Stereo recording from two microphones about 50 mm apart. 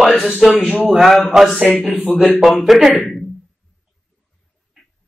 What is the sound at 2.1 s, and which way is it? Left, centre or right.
Speech, left.